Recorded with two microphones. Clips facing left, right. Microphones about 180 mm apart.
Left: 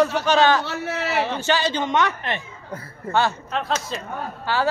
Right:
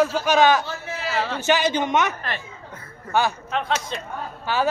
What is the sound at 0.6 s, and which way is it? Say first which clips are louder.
Speech: left 4 dB; 70° left (ahead or behind).